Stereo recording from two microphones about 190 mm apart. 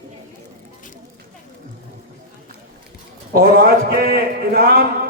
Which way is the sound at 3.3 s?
50° right (ahead or behind).